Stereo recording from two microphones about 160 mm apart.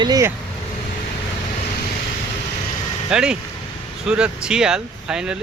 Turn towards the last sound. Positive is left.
turn(degrees=-5)  # may be behind; listen again after turning